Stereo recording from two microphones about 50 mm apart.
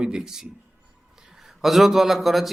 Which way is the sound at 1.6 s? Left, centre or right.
Centre.